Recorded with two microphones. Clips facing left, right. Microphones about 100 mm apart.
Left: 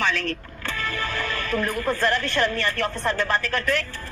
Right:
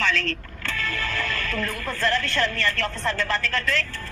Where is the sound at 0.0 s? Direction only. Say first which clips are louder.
Even; 15° left (ahead or behind).